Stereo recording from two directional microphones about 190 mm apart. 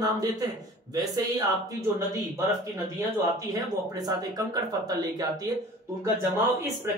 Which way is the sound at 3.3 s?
20° right (ahead or behind).